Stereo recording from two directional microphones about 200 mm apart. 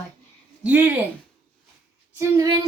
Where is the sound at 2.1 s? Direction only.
15° right (ahead or behind).